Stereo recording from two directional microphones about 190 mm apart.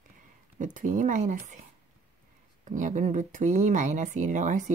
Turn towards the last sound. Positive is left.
turn(degrees=-40)  # may be behind; listen again after turning